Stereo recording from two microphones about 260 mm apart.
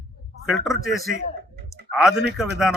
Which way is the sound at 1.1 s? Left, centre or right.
Right.